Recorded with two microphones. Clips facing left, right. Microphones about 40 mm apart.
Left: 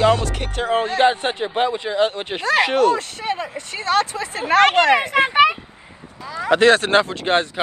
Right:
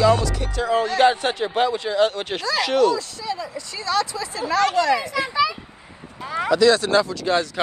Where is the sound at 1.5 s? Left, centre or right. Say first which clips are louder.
Left 1 dB; left.